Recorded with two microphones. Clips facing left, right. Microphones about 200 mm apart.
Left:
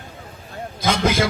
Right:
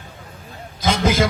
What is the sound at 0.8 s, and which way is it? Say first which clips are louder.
Speech: right 1 dB; 55° left (ahead or behind).